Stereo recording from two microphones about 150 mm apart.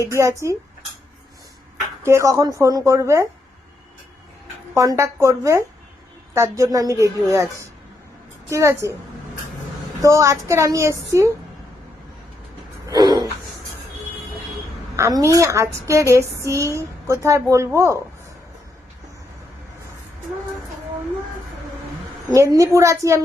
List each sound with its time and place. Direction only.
0.0 s a woman's voice: 20° right (ahead or behind)
2.0 s a woman's voice: 20° right (ahead or behind)
4.7 s a woman's voice: 20° right (ahead or behind)
10.0 s a woman's voice: 20° right (ahead or behind)
12.9 s a sound: 25° right (ahead or behind)
14.9 s a woman's voice: 20° right (ahead or behind)
22.3 s a woman's voice: 25° right (ahead or behind)